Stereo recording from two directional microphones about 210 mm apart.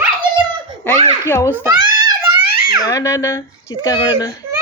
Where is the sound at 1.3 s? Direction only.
10° left (ahead or behind).